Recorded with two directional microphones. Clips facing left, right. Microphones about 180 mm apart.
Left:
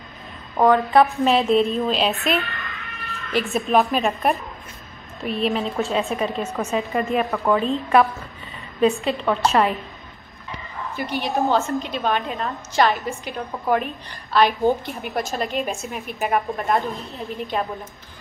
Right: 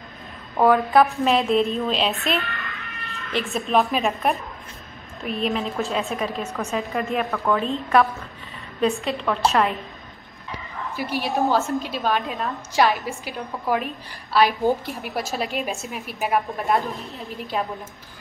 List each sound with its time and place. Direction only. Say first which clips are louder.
0.6 s a woman's voice: left 1 dB; 5° right (ahead or behind)
7.2 s a woman's voice: left 2 dB; 15° left (ahead or behind)
7.5 s a woman's voice: left 2 dB; centre (ahead or behind)
11.0 s a woman's voice: even; 5° right (ahead or behind)